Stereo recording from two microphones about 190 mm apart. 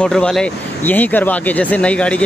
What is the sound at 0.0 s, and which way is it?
Speech, 5° left (ahead or behind).